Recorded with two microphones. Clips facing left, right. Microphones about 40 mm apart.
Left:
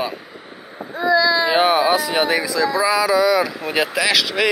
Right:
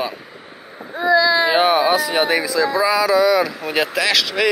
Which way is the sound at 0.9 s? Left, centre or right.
Right.